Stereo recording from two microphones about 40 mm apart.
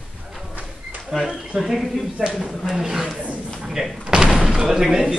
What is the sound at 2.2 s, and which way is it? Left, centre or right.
Speech, centre.